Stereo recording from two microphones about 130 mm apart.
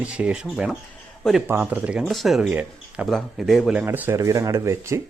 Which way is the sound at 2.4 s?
10° right (ahead or behind).